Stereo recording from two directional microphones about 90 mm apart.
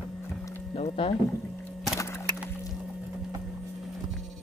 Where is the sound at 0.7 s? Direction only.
90° left.